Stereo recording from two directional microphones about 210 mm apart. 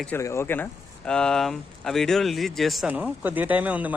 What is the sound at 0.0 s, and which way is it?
Speech, 10° left (ahead or behind).